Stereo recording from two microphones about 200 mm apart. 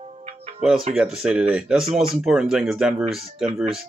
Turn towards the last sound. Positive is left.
turn(degrees=0)  # may be behind; listen again after turning